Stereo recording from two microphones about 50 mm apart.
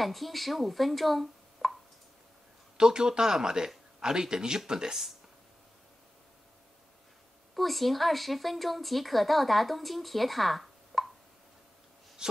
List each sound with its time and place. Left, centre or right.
0.0 s speech: centre
2.8 s speech: centre
7.5 s speech: centre
12.2 s a sound: centre